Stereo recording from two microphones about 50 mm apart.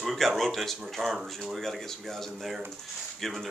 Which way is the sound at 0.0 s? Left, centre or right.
Centre.